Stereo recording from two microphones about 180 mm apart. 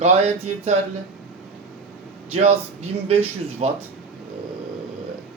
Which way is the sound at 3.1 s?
35° right (ahead or behind).